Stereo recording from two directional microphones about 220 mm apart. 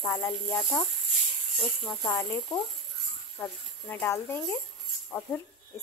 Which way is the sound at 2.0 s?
15° left (ahead or behind).